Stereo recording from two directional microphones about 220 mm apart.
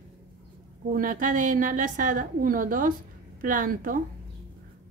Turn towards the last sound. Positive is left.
turn(degrees=-40)  # may be behind; listen again after turning